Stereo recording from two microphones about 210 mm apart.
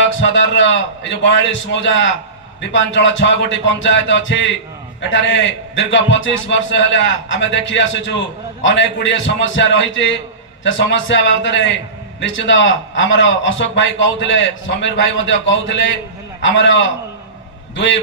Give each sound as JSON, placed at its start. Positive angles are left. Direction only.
{"t": 0.0, "sound": "a man's voice", "side_deg": 60}